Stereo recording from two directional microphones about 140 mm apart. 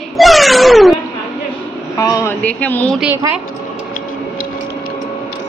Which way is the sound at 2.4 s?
10° left (ahead or behind).